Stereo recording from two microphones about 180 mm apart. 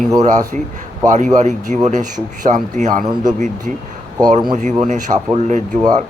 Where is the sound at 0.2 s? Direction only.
45° right (ahead or behind).